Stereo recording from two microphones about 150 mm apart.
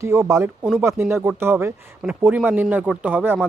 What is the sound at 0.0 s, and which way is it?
Speech, 20° right (ahead or behind).